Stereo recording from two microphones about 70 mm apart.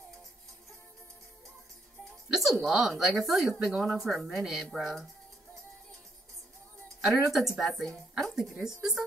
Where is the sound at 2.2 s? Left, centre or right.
Centre.